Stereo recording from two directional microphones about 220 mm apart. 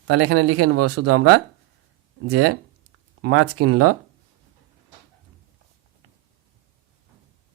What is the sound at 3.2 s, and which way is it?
Speech, 85° right.